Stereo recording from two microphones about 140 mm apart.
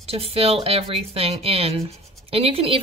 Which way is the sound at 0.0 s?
45° right (ahead or behind).